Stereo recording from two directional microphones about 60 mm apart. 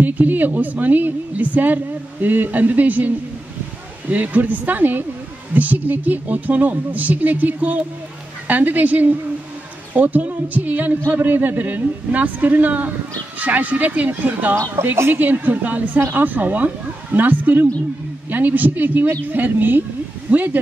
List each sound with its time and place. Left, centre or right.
0.0 s speech: right
4.1 s speech: right